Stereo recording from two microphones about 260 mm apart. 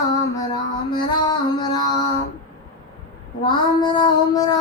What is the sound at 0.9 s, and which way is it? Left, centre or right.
Music, centre.